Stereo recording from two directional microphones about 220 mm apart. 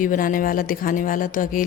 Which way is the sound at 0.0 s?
40° left (ahead or behind).